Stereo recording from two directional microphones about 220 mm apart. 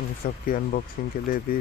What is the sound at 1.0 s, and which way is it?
Speech, 40° left (ahead or behind).